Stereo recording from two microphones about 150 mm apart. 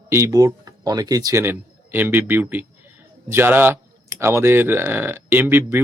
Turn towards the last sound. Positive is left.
turn(degrees=-15)  # may be behind; listen again after turning